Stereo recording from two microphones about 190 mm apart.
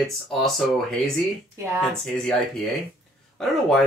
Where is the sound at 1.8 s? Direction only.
5° left (ahead or behind).